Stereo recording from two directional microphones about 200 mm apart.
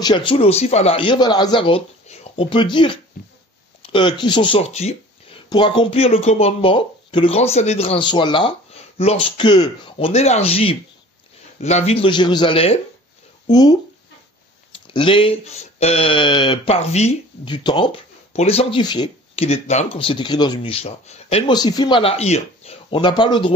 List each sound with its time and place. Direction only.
0.0 s speech: 25° left (ahead or behind)